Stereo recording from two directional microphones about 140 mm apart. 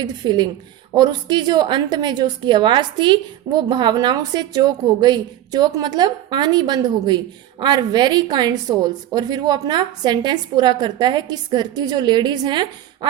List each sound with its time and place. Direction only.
0.0 s a woman's voice: 30° right (ahead or behind)